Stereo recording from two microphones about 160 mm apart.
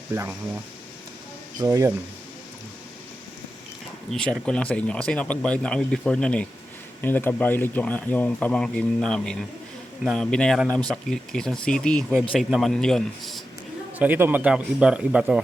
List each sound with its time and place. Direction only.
0.1 s speech: 15° right (ahead or behind)
1.5 s speech: 20° right (ahead or behind)
4.1 s speech: 5° left (ahead or behind)
14.0 s speech: 10° right (ahead or behind)